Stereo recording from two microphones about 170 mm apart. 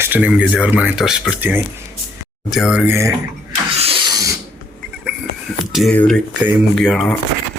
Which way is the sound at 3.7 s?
35° right (ahead or behind).